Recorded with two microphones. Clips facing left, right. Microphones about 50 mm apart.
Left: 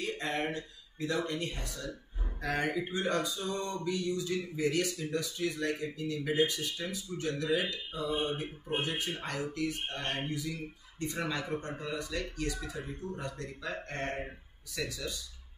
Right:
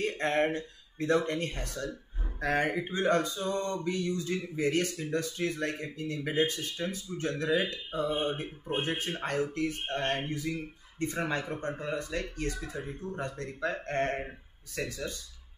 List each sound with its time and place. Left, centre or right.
0.0 s speech: right